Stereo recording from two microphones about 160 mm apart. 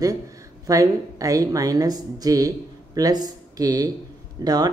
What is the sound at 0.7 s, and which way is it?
Speech, 20° right (ahead or behind).